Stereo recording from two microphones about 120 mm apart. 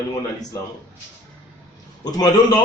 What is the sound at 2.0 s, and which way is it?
Speech, 35° left (ahead or behind).